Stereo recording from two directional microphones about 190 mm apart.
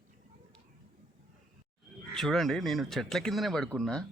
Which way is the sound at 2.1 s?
Centre (ahead or behind).